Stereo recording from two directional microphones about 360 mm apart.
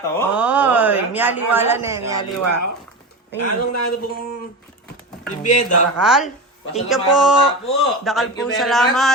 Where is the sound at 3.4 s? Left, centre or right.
Left.